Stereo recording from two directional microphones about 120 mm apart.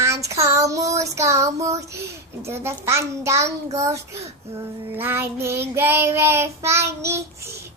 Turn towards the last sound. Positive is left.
turn(degrees=-25)  # may be behind; listen again after turning